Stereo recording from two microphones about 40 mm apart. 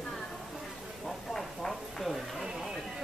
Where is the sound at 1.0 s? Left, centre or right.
Centre.